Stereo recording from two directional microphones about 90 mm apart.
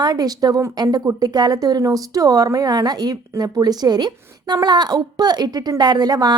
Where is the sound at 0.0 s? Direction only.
45° right (ahead or behind).